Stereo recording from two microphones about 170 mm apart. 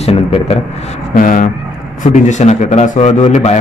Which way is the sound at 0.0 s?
35° left (ahead or behind).